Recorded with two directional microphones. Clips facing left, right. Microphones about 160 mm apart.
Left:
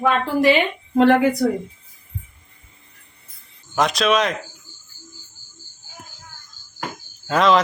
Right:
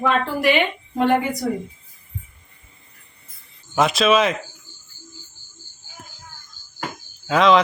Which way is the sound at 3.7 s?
5° right (ahead or behind).